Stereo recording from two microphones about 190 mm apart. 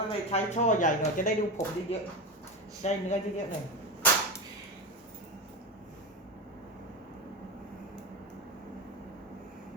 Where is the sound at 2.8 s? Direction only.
35° left (ahead or behind).